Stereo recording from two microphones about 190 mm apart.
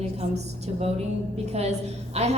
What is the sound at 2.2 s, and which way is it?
Speech, 35° right (ahead or behind).